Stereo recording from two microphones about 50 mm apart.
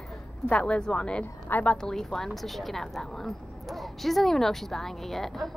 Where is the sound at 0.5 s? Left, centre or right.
Left.